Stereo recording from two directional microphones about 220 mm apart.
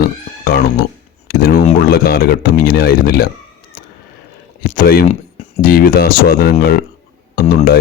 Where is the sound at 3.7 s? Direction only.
40° left (ahead or behind).